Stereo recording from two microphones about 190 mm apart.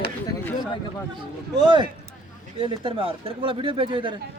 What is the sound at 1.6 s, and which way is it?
Speech, 25° right (ahead or behind).